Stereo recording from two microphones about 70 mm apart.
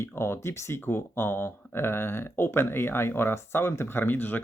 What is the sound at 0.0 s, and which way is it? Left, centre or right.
Speech, left.